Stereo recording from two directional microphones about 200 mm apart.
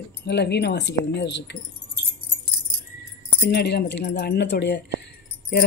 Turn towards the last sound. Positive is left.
turn(degrees=55)  # may be behind; listen again after turning